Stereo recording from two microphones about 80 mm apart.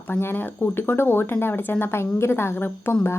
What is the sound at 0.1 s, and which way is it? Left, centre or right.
A woman's voice, left.